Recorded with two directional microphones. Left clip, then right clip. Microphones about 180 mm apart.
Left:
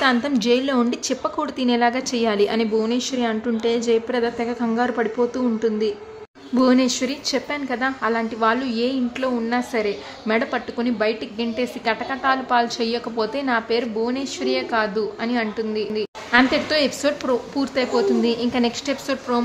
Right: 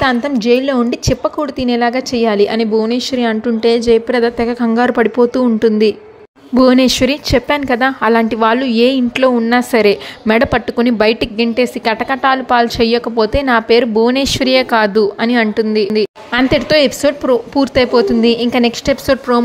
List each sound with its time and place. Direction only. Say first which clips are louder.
0.0 s a woman's voice: right 5 dB; 25° right (ahead or behind)